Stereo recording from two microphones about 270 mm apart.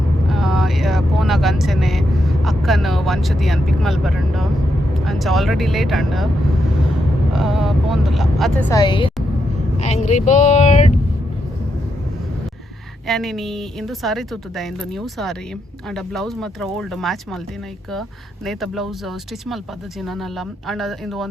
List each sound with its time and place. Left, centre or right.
0.3 s vehicle: centre
5.0 s a woman's voice: centre
7.3 s speech: centre
8.7 s a woman's voice: centre
13.1 s a woman's voice: centre
18.4 s a woman's voice: centre